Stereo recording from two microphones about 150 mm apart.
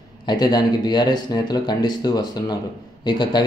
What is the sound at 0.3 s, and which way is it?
Speech, 30° left (ahead or behind).